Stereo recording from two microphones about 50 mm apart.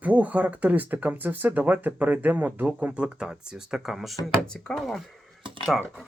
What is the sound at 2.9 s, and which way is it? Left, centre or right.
Speech, centre.